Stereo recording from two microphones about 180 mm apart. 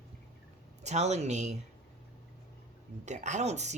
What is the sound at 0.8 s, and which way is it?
Speech, 40° right (ahead or behind).